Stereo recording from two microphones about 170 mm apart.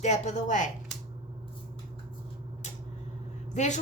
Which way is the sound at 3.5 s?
45° left (ahead or behind).